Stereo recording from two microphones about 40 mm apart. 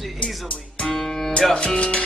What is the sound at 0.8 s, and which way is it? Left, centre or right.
Music, centre.